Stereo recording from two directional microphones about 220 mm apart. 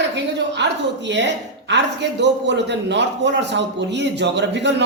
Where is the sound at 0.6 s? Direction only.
55° right (ahead or behind).